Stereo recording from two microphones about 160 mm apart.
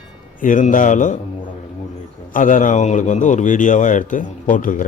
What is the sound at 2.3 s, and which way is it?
Speech, 55° left (ahead or behind).